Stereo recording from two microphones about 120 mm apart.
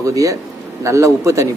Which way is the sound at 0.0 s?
25° right (ahead or behind).